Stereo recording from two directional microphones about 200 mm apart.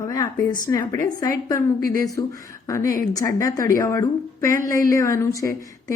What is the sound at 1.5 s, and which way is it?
Speech, 45° right (ahead or behind).